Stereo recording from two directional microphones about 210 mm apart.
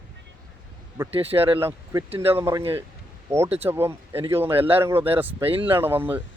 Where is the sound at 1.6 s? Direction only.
10° right (ahead or behind).